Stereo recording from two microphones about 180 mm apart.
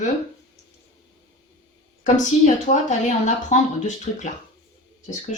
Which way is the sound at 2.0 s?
40° left (ahead or behind).